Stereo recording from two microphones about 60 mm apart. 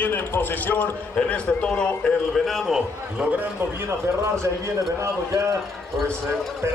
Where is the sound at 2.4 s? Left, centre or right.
Centre.